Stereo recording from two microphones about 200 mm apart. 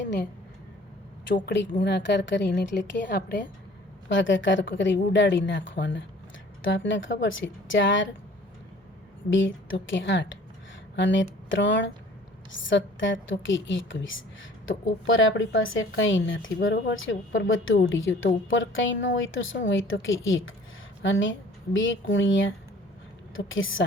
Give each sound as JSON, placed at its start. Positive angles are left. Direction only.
{"t": 1.5, "sound": "a woman's voice", "side_deg": 60}
{"t": 4.1, "sound": "a woman's voice", "side_deg": 70}
{"t": 9.3, "sound": "a woman's voice", "side_deg": 70}